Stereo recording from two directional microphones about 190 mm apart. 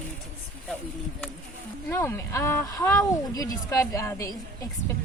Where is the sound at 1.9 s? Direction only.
15° left (ahead or behind).